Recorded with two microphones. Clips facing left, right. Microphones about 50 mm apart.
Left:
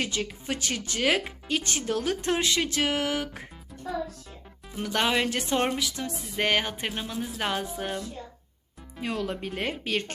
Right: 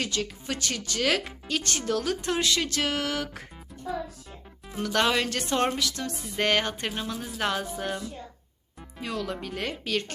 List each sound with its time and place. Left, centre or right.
0.0 s speech: left
4.8 s speech: centre
9.0 s speech: left